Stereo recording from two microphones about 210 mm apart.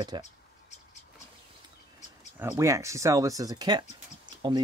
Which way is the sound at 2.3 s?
15° right (ahead or behind).